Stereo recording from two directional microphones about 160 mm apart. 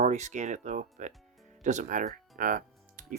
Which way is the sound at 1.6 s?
50° right (ahead or behind).